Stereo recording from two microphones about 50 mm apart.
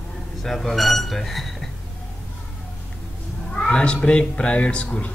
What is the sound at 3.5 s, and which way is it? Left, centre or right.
Speech, centre.